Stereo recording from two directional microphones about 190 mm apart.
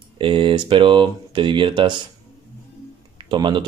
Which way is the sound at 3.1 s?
25° right (ahead or behind).